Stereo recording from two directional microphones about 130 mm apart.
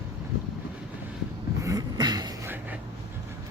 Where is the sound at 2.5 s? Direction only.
15° right (ahead or behind).